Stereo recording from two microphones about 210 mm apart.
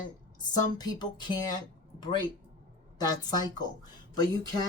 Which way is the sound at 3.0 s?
20° left (ahead or behind).